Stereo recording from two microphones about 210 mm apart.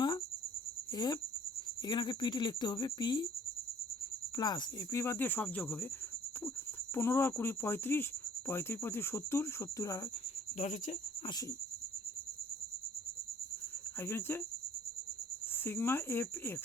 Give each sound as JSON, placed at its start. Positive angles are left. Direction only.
{"t": 0.9, "sound": "speech", "side_deg": 20}
{"t": 4.4, "sound": "speech", "side_deg": 20}
{"t": 6.9, "sound": "speech", "side_deg": 10}
{"t": 10.6, "sound": "speech", "side_deg": 35}
{"t": 14.0, "sound": "speech", "side_deg": 10}
{"t": 15.6, "sound": "speech", "side_deg": 10}